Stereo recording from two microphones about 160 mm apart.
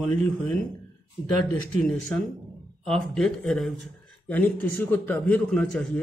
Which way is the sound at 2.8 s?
5° left (ahead or behind).